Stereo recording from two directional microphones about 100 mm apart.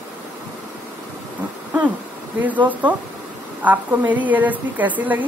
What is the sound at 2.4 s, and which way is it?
A woman's voice, 15° right (ahead or behind).